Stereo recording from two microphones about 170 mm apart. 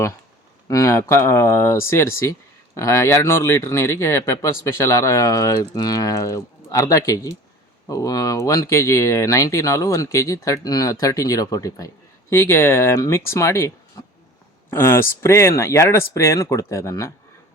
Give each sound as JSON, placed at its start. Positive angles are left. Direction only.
{"t": 0.7, "sound": "speech", "side_deg": 20}